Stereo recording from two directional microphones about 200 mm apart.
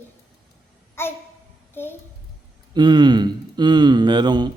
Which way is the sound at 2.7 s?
20° right (ahead or behind).